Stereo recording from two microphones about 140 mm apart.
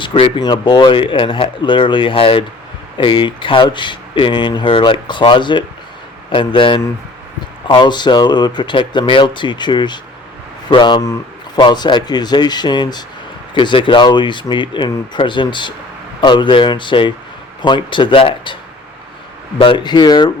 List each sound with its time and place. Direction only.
0.0 s speech: 40° left (ahead or behind)
19.5 s speech: 35° left (ahead or behind)